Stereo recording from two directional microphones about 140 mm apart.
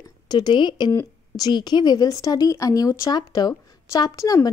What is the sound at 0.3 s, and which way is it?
A woman's voice, 30° left (ahead or behind).